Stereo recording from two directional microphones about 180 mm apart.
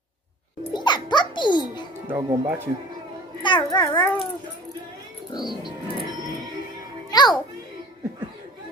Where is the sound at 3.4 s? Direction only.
25° left (ahead or behind).